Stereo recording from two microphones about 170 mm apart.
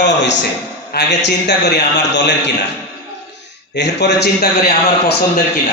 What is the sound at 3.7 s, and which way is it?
A man's voice, 85° left.